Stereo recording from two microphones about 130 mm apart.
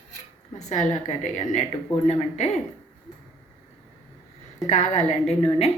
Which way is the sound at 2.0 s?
55° left (ahead or behind).